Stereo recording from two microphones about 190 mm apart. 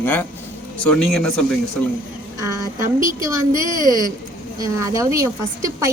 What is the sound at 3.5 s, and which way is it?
Speech, 20° left (ahead or behind).